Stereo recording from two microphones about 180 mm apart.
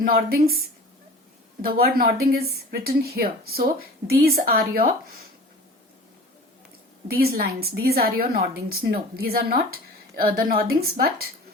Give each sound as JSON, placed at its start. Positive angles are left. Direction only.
{"t": 0.0, "sound": "speech", "side_deg": -55}
{"t": 1.6, "sound": "speech", "side_deg": -55}
{"t": 7.1, "sound": "speech", "side_deg": -55}